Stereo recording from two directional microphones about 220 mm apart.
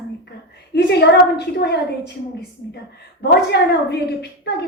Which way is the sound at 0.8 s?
50° left (ahead or behind).